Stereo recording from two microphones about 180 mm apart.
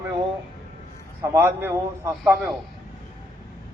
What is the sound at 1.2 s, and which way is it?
A man's voice, 10° right (ahead or behind).